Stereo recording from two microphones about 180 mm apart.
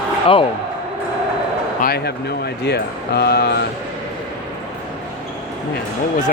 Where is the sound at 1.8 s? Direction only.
60° left (ahead or behind).